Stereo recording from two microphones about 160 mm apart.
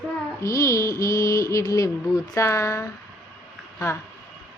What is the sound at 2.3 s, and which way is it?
Speech, 20° left (ahead or behind).